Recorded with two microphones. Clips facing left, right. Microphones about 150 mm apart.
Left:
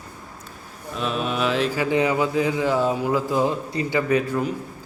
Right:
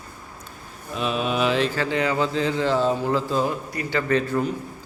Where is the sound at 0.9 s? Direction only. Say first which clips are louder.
Right 1 dB; centre (ahead or behind); by 4.0 s 25° left (ahead or behind).